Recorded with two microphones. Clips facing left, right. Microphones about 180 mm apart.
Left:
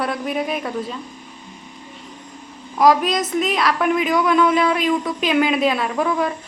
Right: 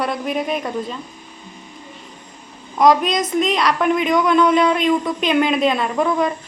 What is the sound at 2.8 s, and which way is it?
Speech, 5° left (ahead or behind).